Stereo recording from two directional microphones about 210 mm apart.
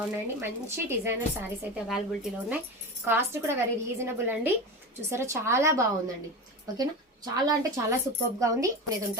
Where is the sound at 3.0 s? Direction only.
10° right (ahead or behind).